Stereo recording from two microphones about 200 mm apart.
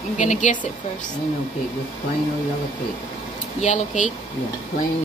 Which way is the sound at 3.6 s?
40° left (ahead or behind).